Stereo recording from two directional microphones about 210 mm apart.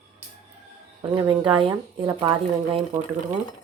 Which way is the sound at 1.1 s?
15° right (ahead or behind).